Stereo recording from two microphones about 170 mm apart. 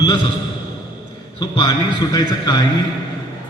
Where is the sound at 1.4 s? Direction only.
25° left (ahead or behind).